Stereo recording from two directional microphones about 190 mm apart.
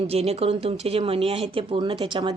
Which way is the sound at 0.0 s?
30° right (ahead or behind).